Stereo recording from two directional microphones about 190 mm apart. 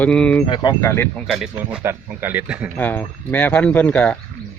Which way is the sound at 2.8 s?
10° left (ahead or behind).